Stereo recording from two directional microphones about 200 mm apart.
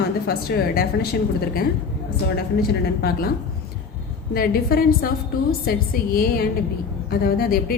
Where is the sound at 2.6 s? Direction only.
50° left (ahead or behind).